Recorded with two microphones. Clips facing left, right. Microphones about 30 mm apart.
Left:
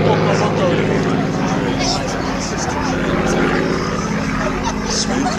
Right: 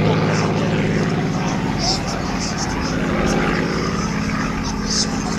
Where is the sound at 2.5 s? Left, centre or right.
Centre.